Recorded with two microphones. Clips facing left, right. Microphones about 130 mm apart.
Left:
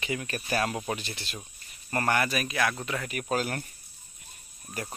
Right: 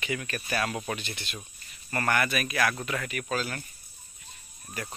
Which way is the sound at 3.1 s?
40° left (ahead or behind).